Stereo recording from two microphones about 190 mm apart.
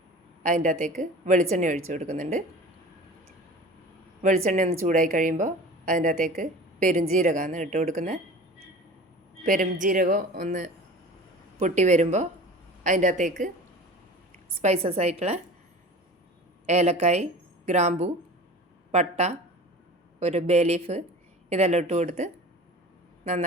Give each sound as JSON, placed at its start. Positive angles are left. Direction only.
{"t": 0.4, "sound": "speech", "side_deg": -45}
{"t": 4.4, "sound": "a woman's voice", "side_deg": -40}
{"t": 9.4, "sound": "speech", "side_deg": -45}
{"t": 14.6, "sound": "speech", "side_deg": -35}
{"t": 16.6, "sound": "speech", "side_deg": -35}